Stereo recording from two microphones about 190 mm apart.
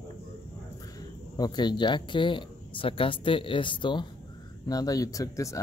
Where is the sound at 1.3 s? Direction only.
20° left (ahead or behind).